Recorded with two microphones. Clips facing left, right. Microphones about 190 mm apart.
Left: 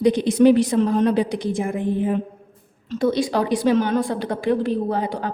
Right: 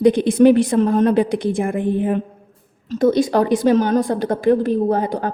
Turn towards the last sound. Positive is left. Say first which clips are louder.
# right 5 dB
turn(degrees=-45)  # may be behind; listen again after turning